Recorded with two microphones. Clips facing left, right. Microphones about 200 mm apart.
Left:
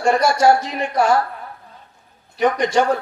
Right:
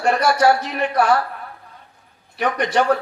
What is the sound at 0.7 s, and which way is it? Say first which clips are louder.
Speech: even; 60° right (ahead or behind).